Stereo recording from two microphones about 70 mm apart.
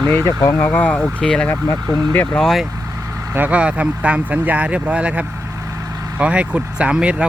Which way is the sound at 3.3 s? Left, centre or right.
Right.